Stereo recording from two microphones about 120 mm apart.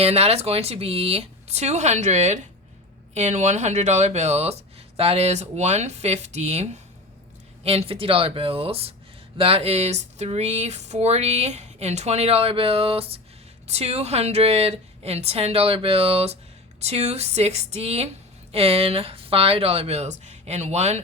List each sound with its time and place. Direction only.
0.0 s speech: 60° right (ahead or behind)
13.7 s speech: 60° right (ahead or behind)